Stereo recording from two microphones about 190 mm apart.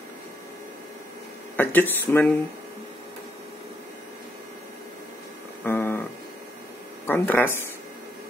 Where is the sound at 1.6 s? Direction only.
10° left (ahead or behind).